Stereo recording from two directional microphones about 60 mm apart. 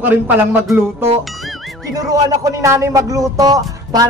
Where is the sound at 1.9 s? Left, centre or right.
Right.